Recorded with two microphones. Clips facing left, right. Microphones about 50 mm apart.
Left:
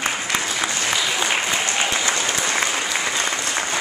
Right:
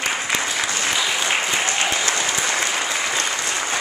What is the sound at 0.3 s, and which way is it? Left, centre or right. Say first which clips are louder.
Applause: even; centre.